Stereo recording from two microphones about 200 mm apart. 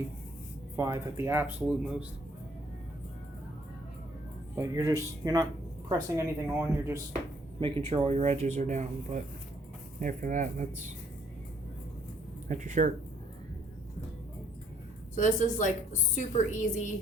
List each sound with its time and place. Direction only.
0.8 s speech: 15° right (ahead or behind)
4.5 s speech: 15° right (ahead or behind)
7.6 s speech: 25° right (ahead or behind)
12.5 s speech: 35° right (ahead or behind)
15.1 s a woman's voice: 40° left (ahead or behind)